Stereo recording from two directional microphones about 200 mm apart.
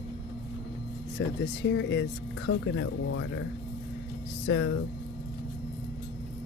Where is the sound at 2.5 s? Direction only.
90° left.